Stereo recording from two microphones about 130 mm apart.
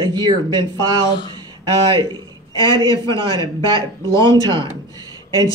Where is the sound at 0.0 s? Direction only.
30° right (ahead or behind).